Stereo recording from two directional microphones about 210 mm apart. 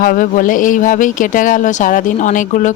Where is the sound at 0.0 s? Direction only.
40° left (ahead or behind).